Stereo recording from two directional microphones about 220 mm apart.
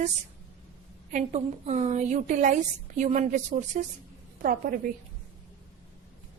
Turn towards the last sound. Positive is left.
turn(degrees=-40)  # may be behind; listen again after turning